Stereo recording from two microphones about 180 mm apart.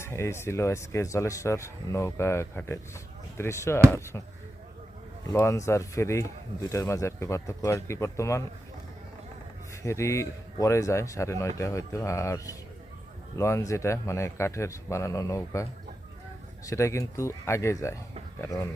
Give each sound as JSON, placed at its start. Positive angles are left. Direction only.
{"t": 0.0, "sound": "speech", "side_deg": 15}
{"t": 5.3, "sound": "speech", "side_deg": 15}
{"t": 9.8, "sound": "speech", "side_deg": 15}
{"t": 16.6, "sound": "speech", "side_deg": 15}